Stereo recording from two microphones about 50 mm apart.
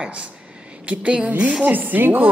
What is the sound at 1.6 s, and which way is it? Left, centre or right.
Speech, right.